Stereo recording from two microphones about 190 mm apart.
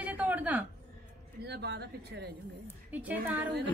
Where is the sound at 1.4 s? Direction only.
60° right (ahead or behind).